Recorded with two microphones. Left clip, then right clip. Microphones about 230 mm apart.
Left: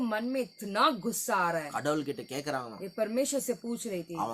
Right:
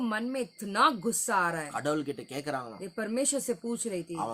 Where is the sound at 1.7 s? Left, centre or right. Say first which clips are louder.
Even; centre.